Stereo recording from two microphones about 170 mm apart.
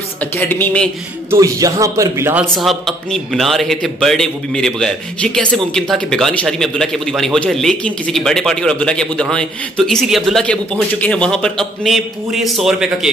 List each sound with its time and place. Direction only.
0.4 s speech: 10° left (ahead or behind)
1.3 s a man's voice: 20° right (ahead or behind)
2.5 s a man's voice: centre (ahead or behind)